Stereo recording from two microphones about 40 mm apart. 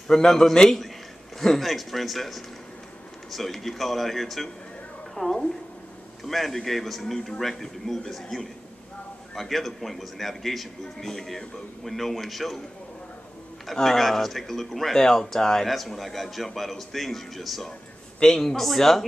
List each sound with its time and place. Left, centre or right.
0.1 s speech: centre
13.7 s speech: centre